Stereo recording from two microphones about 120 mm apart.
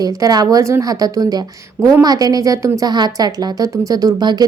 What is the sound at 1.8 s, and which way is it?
Speech, 20° right (ahead or behind).